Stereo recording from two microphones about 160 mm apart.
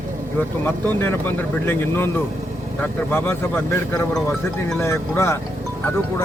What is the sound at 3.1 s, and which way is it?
A man's voice, 15° left (ahead or behind).